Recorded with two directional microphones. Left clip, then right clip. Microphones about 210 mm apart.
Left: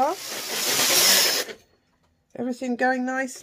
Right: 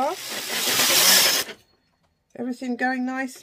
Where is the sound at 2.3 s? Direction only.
30° left (ahead or behind).